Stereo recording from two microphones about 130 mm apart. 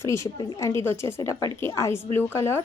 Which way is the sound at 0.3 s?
30° left (ahead or behind).